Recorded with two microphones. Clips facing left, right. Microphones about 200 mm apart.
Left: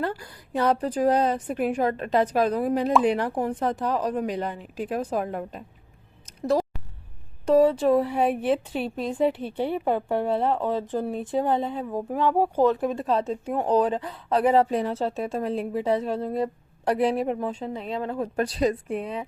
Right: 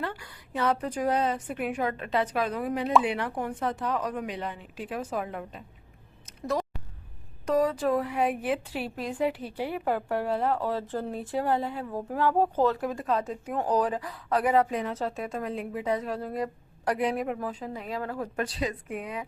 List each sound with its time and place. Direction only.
0.0 s a woman's voice: 40° left (ahead or behind)
7.4 s a woman's voice: 30° left (ahead or behind)
18.3 s a woman's voice: 35° left (ahead or behind)